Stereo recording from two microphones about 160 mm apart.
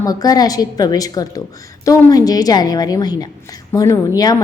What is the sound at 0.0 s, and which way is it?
A woman's voice, 25° left (ahead or behind).